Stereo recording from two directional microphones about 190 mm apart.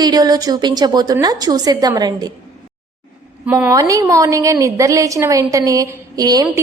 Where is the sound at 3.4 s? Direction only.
10° right (ahead or behind).